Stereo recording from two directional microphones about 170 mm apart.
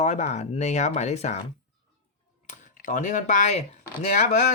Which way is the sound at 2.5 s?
50° left (ahead or behind).